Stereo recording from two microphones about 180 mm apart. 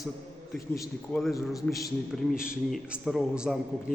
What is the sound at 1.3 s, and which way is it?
Speech, 20° left (ahead or behind).